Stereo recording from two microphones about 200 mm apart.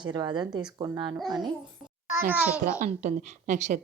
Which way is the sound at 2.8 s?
35° right (ahead or behind).